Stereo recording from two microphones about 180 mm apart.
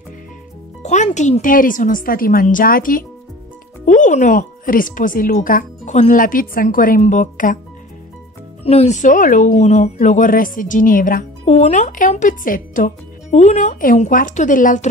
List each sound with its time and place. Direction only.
0.8 s speech: 40° left (ahead or behind)
8.6 s speech: 35° left (ahead or behind)